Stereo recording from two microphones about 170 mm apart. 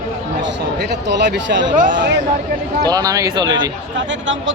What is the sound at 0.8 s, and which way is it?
A man's voice, 85° right.